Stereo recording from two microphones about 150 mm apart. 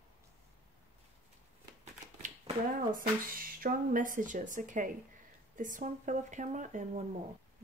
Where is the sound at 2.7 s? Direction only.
65° right (ahead or behind).